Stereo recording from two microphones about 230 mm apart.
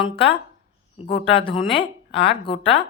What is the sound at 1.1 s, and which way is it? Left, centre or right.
A woman's voice, left.